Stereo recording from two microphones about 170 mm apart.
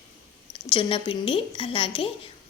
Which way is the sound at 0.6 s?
30° left (ahead or behind).